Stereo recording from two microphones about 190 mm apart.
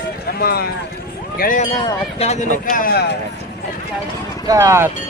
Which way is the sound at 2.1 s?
35° left (ahead or behind).